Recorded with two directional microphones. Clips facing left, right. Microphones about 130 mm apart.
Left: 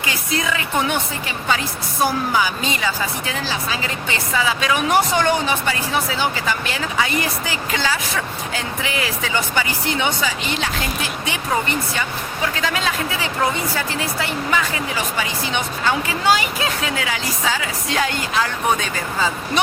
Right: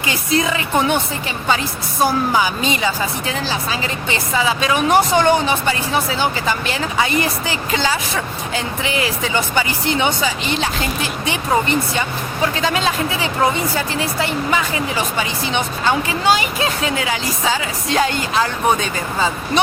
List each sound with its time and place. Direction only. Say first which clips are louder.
0.0 s a woman's voice: right 5 dB; 25° right (ahead or behind)
11.9 s a woman's voice: right 4 dB; 25° right (ahead or behind)